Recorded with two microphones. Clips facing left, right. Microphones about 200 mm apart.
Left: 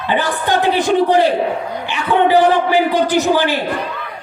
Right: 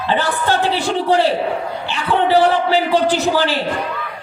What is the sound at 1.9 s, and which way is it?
A man's voice, 15° left (ahead or behind).